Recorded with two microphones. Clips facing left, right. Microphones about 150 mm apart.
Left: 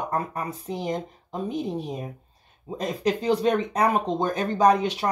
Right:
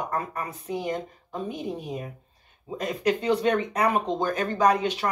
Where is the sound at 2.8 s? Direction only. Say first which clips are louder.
Even; 35° left (ahead or behind).